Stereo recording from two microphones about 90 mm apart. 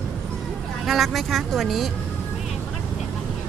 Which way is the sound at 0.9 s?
Centre (ahead or behind).